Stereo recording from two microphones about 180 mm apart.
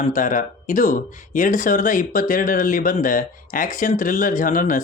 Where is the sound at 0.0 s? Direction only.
45° left (ahead or behind).